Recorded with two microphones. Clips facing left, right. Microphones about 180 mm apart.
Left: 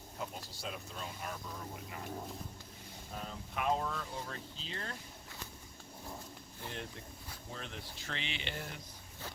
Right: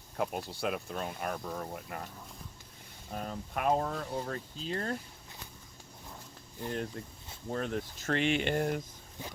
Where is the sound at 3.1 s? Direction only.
50° right (ahead or behind).